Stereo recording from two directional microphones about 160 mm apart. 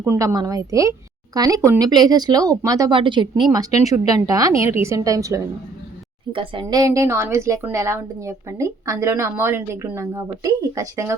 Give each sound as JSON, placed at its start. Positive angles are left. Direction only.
{"t": 0.0, "sound": "speech", "side_deg": -15}
{"t": 6.3, "sound": "speech", "side_deg": -35}